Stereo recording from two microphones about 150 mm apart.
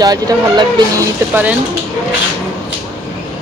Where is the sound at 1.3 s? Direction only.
10° right (ahead or behind).